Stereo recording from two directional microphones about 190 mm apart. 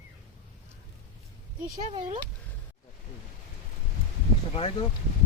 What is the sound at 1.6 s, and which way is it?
Speech, 25° right (ahead or behind).